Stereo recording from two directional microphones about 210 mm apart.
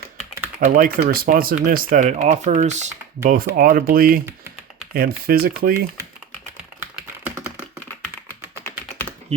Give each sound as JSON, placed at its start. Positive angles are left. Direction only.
{"t": 0.6, "sound": "speech", "side_deg": -40}
{"t": 3.2, "sound": "speech", "side_deg": -45}
{"t": 7.3, "sound": "computer keyboard", "side_deg": -10}